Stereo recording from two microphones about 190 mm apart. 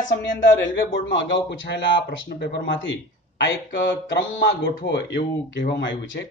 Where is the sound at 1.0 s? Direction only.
70° left (ahead or behind).